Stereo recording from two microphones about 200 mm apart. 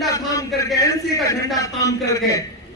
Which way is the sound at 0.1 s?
15° left (ahead or behind).